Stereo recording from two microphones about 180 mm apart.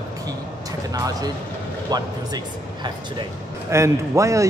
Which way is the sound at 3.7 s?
15° right (ahead or behind).